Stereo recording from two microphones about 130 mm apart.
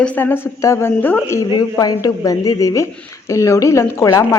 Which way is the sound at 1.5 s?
30° left (ahead or behind).